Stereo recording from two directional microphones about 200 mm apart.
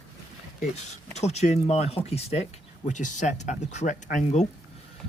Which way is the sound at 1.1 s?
35° left (ahead or behind).